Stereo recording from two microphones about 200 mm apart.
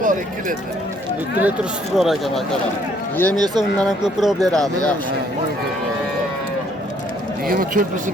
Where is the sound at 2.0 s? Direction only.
Centre (ahead or behind).